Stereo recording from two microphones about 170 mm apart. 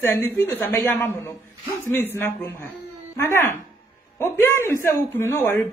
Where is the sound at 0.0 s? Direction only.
15° left (ahead or behind).